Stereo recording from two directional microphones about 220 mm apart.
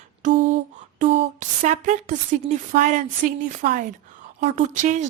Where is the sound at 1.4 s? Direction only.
30° right (ahead or behind).